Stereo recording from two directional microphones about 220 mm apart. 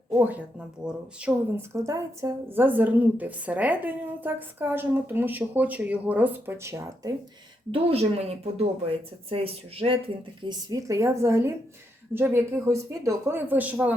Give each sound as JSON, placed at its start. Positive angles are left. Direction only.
{"t": 0.1, "sound": "speech", "side_deg": -10}
{"t": 7.7, "sound": "a woman's voice", "side_deg": -25}